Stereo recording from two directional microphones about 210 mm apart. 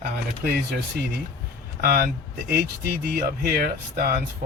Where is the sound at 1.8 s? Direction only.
40° right (ahead or behind).